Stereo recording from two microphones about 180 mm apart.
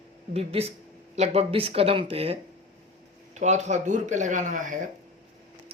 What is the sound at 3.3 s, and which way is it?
Speech, 40° right (ahead or behind).